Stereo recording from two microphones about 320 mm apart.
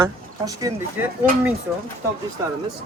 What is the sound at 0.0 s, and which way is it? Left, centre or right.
Speech, centre.